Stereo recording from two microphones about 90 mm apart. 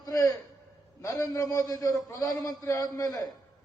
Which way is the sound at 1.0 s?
35° left (ahead or behind).